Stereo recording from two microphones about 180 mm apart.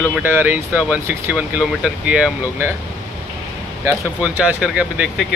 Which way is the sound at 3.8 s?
5° right (ahead or behind).